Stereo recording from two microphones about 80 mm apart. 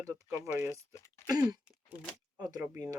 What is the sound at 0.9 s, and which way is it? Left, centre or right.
Speech, left.